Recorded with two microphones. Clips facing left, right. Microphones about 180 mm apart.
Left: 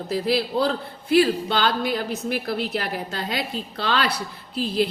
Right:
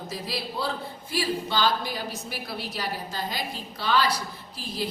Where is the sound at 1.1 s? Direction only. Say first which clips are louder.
Left 10 dB; 65° left (ahead or behind).